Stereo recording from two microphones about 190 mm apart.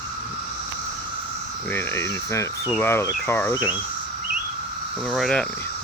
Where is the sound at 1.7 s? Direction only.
10° left (ahead or behind).